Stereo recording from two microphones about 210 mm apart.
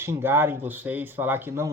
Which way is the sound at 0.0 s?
10° right (ahead or behind).